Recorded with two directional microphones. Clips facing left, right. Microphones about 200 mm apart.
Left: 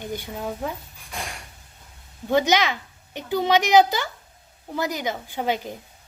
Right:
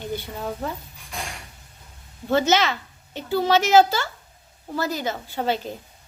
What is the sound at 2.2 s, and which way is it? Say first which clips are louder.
A woman's voice: even; 15° left (ahead or behind).